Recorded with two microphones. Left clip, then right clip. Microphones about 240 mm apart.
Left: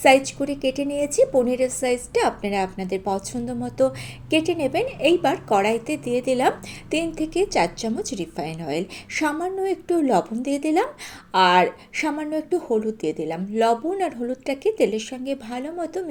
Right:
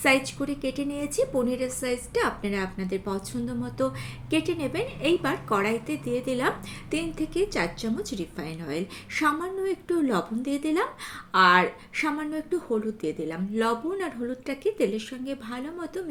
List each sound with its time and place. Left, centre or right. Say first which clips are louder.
0.0 s a woman's voice: left 7 dB; centre